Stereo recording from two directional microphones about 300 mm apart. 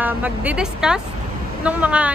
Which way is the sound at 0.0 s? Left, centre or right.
Centre.